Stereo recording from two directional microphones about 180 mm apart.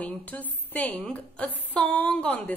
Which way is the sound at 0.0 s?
10° left (ahead or behind).